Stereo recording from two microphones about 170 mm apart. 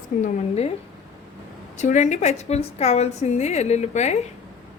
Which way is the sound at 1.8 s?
45° left (ahead or behind).